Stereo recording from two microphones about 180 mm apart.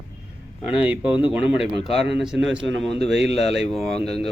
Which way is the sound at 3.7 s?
Centre (ahead or behind).